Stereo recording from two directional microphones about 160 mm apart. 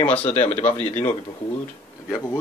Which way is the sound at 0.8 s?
45° left (ahead or behind).